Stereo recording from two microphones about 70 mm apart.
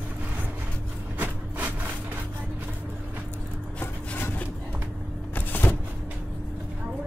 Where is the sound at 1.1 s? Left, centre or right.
Right.